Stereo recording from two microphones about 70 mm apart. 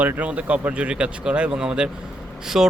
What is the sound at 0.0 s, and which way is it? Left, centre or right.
Speech, right.